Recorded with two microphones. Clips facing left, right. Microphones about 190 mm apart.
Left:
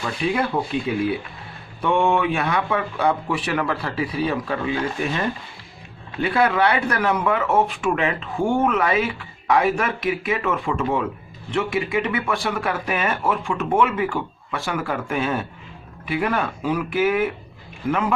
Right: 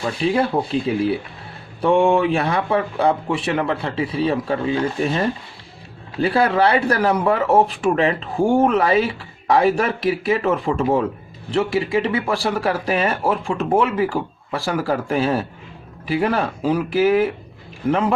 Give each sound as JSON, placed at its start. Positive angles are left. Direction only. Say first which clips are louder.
{"t": 0.0, "sound": "speech", "louder": "right 4 dB", "side_deg": -30}